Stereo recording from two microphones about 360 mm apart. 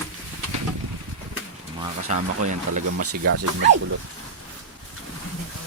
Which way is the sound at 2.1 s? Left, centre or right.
Centre.